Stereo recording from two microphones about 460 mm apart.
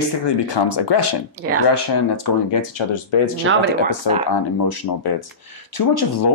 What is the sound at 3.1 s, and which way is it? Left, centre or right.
Speech, left.